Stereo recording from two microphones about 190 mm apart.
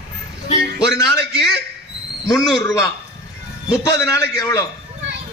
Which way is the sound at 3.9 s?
15° left (ahead or behind).